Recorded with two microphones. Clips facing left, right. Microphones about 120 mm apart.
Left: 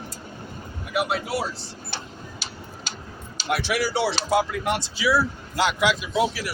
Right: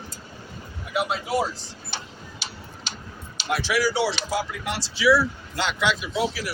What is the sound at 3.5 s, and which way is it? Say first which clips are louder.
Speech: right 1 dB; 55° left (ahead or behind).